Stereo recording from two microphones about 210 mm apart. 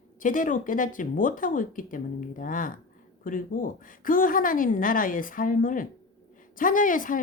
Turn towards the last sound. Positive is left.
turn(degrees=40)  # may be behind; listen again after turning